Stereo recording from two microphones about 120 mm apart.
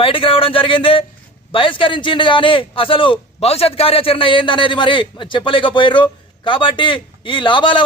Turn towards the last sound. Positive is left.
turn(degrees=45)  # may be behind; listen again after turning